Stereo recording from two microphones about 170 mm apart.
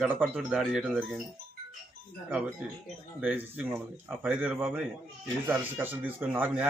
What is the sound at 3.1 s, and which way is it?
Speech, 10° right (ahead or behind).